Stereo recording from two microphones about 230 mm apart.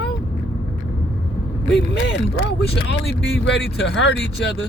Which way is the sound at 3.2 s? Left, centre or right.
Left.